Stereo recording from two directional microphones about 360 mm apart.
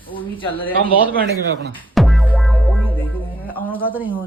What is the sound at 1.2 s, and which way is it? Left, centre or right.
Speech, right.